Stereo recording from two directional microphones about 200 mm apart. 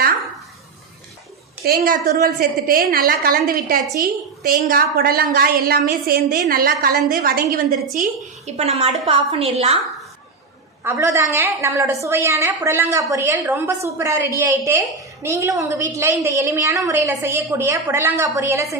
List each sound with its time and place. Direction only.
1.6 s a woman's voice: 50° right (ahead or behind); by 9.7 s 30° right (ahead or behind)
10.8 s a woman's voice: 15° right (ahead or behind)